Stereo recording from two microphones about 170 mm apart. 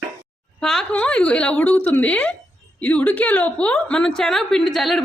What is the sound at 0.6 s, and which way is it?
A woman's voice, 5° left (ahead or behind).